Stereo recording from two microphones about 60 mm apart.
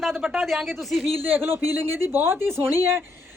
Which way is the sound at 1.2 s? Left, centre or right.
Right.